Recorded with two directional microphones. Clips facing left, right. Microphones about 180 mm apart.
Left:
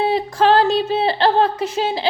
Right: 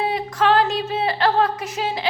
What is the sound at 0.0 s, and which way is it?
A woman's voice, 30° left (ahead or behind).